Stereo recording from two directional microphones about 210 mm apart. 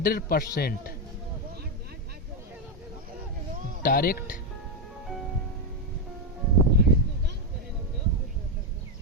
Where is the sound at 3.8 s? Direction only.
45° left (ahead or behind).